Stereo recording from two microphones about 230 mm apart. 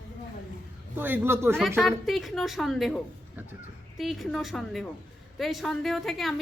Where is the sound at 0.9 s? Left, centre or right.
Centre.